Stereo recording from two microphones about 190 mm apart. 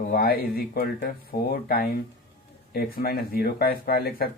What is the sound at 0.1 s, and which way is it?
Speech, 55° left (ahead or behind).